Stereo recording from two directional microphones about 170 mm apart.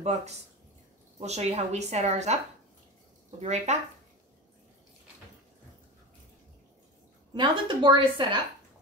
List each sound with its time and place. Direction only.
0.0 s a woman's voice: 40° right (ahead or behind)
7.3 s a woman's voice: 25° right (ahead or behind)